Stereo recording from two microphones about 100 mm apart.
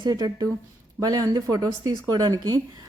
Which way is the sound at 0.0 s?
40° right (ahead or behind).